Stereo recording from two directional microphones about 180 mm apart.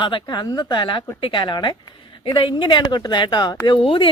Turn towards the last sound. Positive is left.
turn(degrees=30)  # may be behind; listen again after turning